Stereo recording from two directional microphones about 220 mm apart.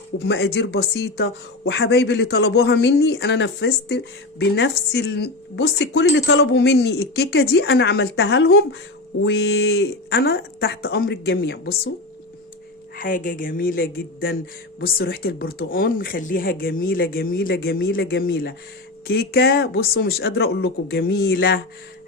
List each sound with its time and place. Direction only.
0.2 s speech: 50° left (ahead or behind)
13.0 s a woman's voice: 35° left (ahead or behind)